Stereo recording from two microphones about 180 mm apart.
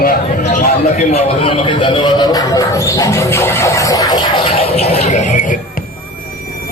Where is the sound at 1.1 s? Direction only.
35° left (ahead or behind).